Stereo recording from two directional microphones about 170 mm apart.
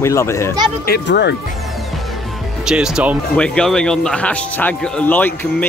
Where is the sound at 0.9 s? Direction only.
80° left.